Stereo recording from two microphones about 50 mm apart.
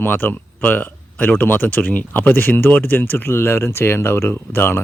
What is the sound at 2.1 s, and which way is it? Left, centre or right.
Speech, left.